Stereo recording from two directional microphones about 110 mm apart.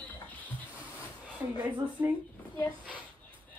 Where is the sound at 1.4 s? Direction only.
15° right (ahead or behind).